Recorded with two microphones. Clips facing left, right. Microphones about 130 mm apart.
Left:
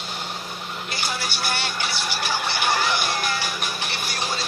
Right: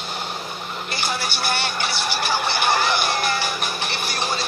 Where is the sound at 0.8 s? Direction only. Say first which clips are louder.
Right 3 dB; 60° right (ahead or behind).